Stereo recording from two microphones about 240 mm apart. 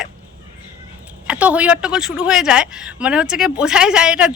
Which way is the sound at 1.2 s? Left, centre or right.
Centre.